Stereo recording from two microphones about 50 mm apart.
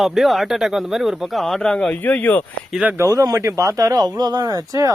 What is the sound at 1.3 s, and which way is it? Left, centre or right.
Speech, centre.